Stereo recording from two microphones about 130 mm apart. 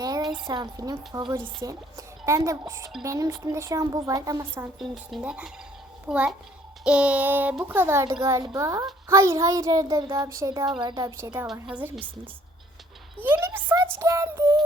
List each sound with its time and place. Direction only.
0.4 s speech: 30° right (ahead or behind)
4.8 s a child's voice: 5° right (ahead or behind); by 11.3 s 30° right (ahead or behind)
11.7 s a child's voice: 15° right (ahead or behind)
13.1 s a child's voice: 15° right (ahead or behind)